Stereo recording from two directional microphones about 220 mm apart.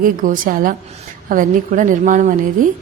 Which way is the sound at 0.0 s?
35° right (ahead or behind).